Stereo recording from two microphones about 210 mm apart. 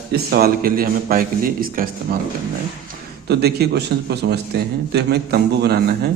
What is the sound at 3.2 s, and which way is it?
A man's voice, 50° right (ahead or behind).